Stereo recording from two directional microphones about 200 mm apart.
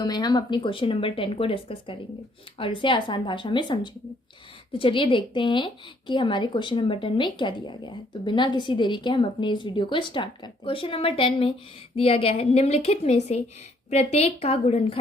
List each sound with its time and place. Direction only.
0.0 s a woman's voice: 20° left (ahead or behind)